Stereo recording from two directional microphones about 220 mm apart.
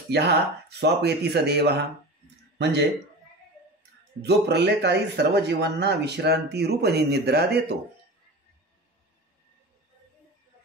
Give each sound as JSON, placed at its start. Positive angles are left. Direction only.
{"t": 0.1, "sound": "speech", "side_deg": -50}
{"t": 4.2, "sound": "speech", "side_deg": -50}